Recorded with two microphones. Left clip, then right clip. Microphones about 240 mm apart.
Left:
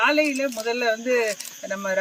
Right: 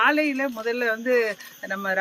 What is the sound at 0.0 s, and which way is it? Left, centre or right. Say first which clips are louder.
Speech: left 1 dB; centre.